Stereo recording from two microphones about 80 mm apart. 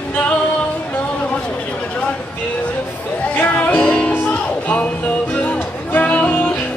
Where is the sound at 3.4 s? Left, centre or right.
Centre.